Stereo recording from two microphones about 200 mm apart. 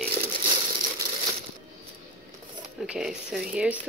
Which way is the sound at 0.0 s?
50° right (ahead or behind).